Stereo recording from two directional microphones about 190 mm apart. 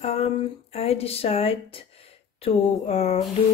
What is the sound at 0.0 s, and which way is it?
A woman's voice, 35° left (ahead or behind).